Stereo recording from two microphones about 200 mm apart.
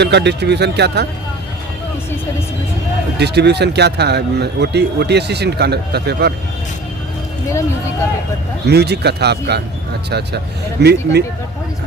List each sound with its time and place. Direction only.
0.0 s speech: 60° right (ahead or behind)
3.2 s speech: 55° right (ahead or behind)
8.6 s speech: 55° right (ahead or behind)